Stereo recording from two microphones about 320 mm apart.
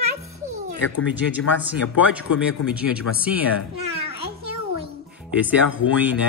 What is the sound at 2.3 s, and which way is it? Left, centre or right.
Speech, left.